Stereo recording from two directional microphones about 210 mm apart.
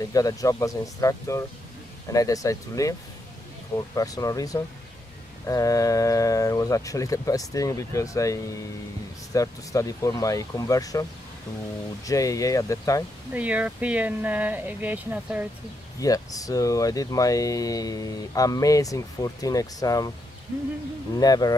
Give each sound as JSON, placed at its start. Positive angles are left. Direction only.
{"t": 0.0, "sound": "speech", "side_deg": 15}
{"t": 13.3, "sound": "speech", "side_deg": -5}
{"t": 16.0, "sound": "speech", "side_deg": 15}
{"t": 21.1, "sound": "speech", "side_deg": 20}